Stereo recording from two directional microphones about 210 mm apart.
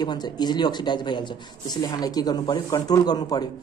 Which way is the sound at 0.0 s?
20° left (ahead or behind).